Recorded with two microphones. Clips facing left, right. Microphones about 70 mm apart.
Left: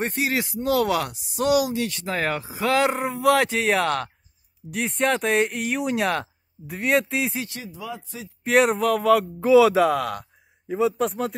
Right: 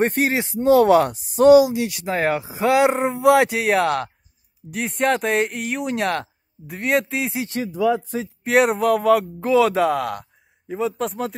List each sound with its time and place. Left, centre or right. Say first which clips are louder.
0.0 s speech: right 6 dB; right
0.3 s speech: right 7 dB; right
1.7 s speech: right 3 dB; centre
3.5 s speech: right 3 dB; centre
7.4 s speech: right 14 dB; right
8.5 s speech: right 2 dB; centre